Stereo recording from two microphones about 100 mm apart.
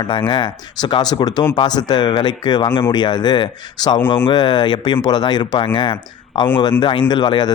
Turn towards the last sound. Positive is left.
turn(degrees=50)  # may be behind; listen again after turning